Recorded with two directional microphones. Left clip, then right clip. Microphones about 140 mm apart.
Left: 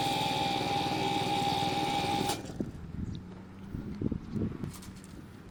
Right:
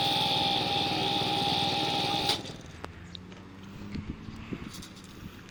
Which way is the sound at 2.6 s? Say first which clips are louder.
Left 10 dB; 70° left (ahead or behind).